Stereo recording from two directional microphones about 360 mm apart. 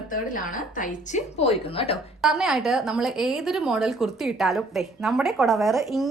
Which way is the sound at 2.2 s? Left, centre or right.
Centre.